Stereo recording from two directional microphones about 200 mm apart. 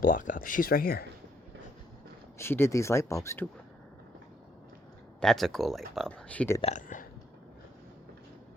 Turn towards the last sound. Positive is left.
turn(degrees=40)  # may be behind; listen again after turning